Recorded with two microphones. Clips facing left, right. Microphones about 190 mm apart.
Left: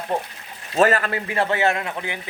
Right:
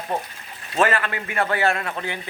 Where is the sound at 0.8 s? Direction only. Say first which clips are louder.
Left 3 dB; 40° left (ahead or behind); by 2.1 s 15° left (ahead or behind).